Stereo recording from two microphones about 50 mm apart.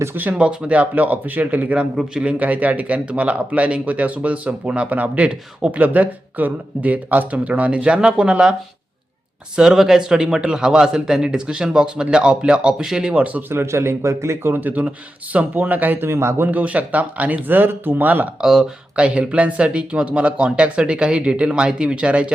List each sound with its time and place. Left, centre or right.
0.3 s speech: right
9.6 s a man's voice: centre
13.1 s speech: right
13.5 s speech: right
14.4 s speech: right
16.0 s speech: right
16.5 s speech: right
18.3 s a man's voice: centre
18.9 s speech: right